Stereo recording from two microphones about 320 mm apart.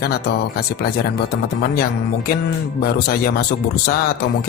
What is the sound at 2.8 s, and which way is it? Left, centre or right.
Speech, left.